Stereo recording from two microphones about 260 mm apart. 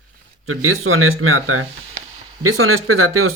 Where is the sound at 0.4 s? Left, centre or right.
Right.